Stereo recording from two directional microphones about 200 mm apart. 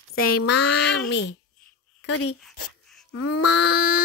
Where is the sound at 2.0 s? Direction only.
90° left.